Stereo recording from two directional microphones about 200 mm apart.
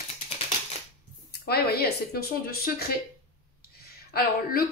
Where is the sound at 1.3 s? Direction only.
50° left (ahead or behind).